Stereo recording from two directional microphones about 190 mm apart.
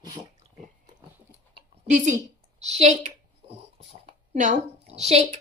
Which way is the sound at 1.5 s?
40° right (ahead or behind).